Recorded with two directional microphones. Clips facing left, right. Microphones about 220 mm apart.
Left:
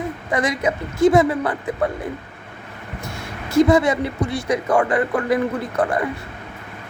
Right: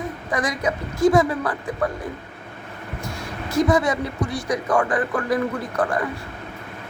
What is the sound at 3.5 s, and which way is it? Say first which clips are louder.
Speech: left 4 dB; 25° left (ahead or behind).